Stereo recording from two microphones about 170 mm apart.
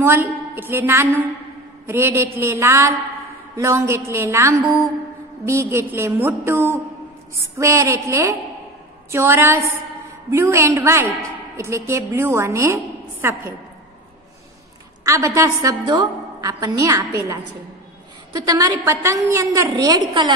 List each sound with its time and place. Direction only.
0.0 s a woman's voice: 10° right (ahead or behind)
15.0 s a woman's voice: 20° right (ahead or behind)
15.8 s a woman's voice: 30° right (ahead or behind)